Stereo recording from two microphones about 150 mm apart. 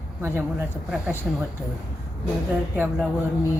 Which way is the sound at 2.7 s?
10° right (ahead or behind).